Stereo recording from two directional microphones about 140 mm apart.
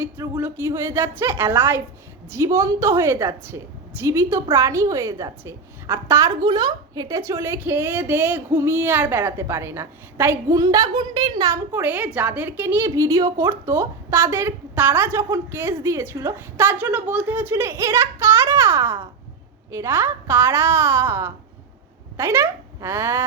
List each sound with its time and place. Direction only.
0.2 s a woman's voice: 15° right (ahead or behind)
11.5 s a woman's voice: 15° right (ahead or behind)